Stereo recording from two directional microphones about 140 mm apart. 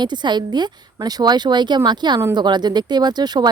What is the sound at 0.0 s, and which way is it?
Speech, 30° right (ahead or behind).